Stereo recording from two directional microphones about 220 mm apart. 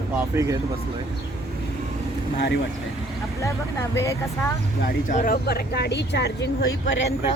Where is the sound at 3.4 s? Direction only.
15° left (ahead or behind).